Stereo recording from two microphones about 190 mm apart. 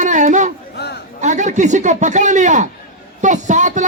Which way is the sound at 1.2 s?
40° right (ahead or behind).